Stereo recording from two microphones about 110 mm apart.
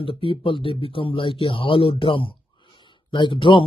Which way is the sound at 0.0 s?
55° left (ahead or behind).